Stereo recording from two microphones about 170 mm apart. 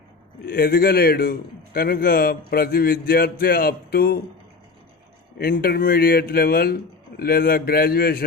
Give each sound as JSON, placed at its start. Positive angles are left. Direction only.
{"t": 0.4, "sound": "a man's voice", "side_deg": 60}
{"t": 5.4, "sound": "a man's voice", "side_deg": 60}